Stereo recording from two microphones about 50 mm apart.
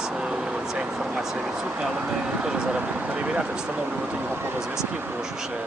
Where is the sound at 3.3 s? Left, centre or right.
Right.